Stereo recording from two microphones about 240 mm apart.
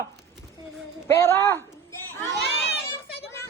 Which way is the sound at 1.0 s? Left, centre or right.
Centre.